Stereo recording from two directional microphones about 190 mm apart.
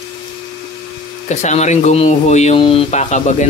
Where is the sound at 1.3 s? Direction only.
35° left (ahead or behind).